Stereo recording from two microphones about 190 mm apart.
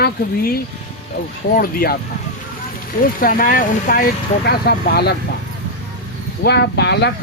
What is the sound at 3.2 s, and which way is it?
Speech, 50° left (ahead or behind).